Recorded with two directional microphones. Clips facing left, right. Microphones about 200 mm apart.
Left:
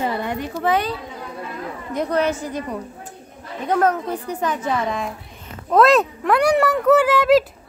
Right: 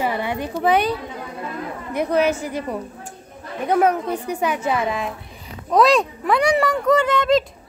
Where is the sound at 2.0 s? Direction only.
10° right (ahead or behind).